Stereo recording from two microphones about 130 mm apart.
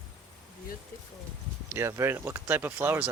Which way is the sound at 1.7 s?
20° right (ahead or behind).